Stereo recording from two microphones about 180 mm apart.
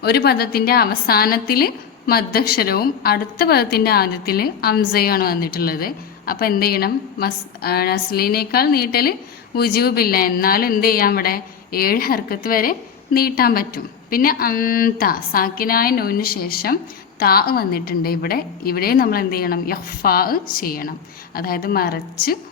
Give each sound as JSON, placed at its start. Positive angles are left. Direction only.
{"t": 0.0, "sound": "a woman's voice", "side_deg": 60}